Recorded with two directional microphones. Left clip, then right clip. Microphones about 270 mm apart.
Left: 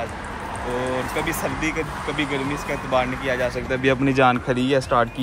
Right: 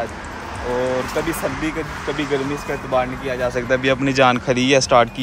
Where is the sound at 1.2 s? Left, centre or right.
Centre.